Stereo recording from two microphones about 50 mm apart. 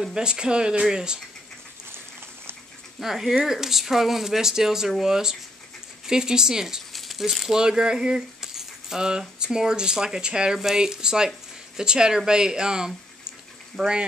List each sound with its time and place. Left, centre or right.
0.0 s speech: centre
3.0 s speech: centre
6.9 s a sound: centre
7.2 s speech: centre